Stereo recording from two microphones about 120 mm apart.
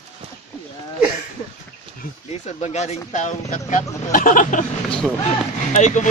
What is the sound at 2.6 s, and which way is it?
A man's voice, 70° left (ahead or behind).